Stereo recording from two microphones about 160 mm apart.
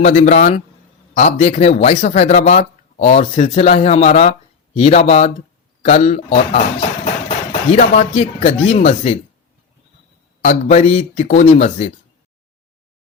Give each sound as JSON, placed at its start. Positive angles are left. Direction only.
{"t": 0.0, "sound": "speech", "side_deg": 45}
{"t": 10.4, "sound": "speech", "side_deg": 45}